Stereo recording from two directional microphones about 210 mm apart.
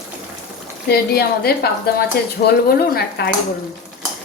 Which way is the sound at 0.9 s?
45° left (ahead or behind).